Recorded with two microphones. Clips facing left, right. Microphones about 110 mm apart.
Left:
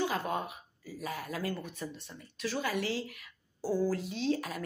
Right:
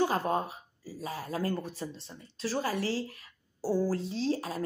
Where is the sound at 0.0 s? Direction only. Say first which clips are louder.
Right 4 dB; 35° right (ahead or behind).